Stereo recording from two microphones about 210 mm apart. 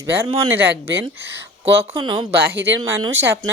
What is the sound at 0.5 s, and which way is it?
Speech, 10° right (ahead or behind).